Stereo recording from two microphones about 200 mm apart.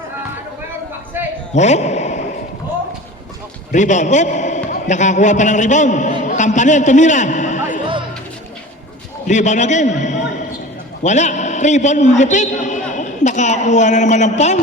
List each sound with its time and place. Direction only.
1.5 s a man's voice: 35° left (ahead or behind)
3.7 s a man's voice: 35° left (ahead or behind)
9.2 s a man's voice: 35° left (ahead or behind)